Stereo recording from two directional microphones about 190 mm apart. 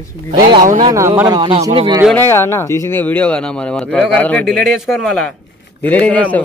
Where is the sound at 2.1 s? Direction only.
10° left (ahead or behind).